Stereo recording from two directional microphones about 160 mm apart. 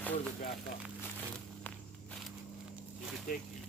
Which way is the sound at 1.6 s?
10° left (ahead or behind).